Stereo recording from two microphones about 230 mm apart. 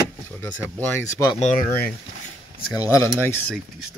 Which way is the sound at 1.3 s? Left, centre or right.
Left.